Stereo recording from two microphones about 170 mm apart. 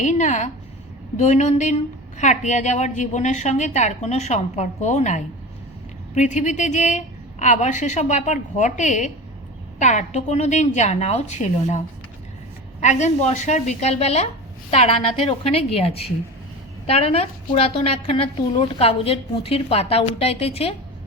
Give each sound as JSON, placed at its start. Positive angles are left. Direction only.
{"t": 0.0, "sound": "a woman's voice", "side_deg": 45}
{"t": 12.8, "sound": "a woman's voice", "side_deg": 45}